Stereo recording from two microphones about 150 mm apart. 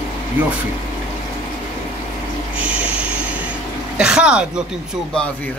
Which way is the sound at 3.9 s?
5° right (ahead or behind).